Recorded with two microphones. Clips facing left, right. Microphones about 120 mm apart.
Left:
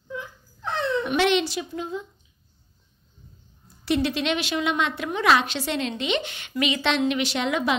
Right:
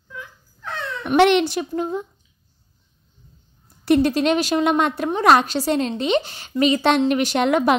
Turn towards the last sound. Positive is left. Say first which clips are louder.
# right 7 dB
turn(degrees=-55)  # may be behind; listen again after turning